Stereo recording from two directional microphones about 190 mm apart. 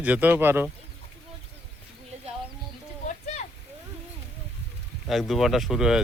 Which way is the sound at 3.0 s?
40° left (ahead or behind).